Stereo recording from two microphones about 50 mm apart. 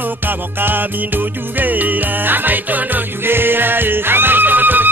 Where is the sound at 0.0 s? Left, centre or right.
Right.